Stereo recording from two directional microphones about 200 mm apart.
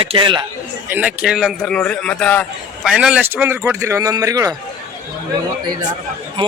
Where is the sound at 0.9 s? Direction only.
5° right (ahead or behind).